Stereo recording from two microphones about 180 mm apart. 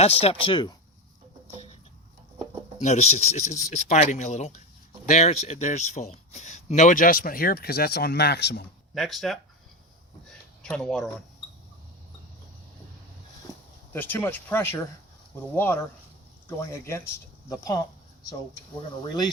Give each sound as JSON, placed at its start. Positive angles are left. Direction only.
{"t": 0.0, "sound": "speech", "side_deg": 35}
{"t": 2.8, "sound": "a man's voice", "side_deg": 40}
{"t": 9.0, "sound": "speech", "side_deg": 0}
{"t": 10.2, "sound": "a sound", "side_deg": 5}
{"t": 13.9, "sound": "speech", "side_deg": 10}